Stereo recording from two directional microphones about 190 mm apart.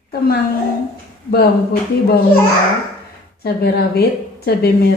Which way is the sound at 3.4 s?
55° left (ahead or behind).